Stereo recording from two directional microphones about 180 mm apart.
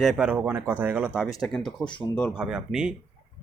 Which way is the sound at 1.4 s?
5° left (ahead or behind).